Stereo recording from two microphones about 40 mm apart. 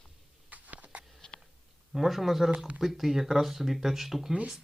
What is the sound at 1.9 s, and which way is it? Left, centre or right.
Speech, centre.